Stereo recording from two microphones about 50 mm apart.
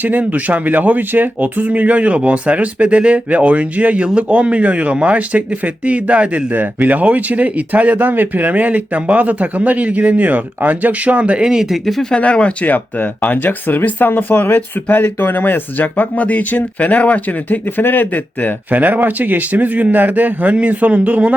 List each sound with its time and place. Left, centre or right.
0.0 s speech: right
6.5 s speech: right; by 11.7 s centre
11.7 s speech: centre
12.1 s speech: left
18.7 s speech: right